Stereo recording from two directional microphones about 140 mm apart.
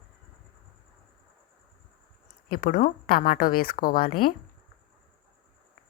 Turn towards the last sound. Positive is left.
turn(degrees=90)